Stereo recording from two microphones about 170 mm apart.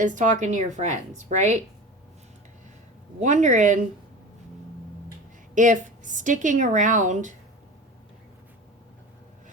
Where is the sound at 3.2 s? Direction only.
45° right (ahead or behind).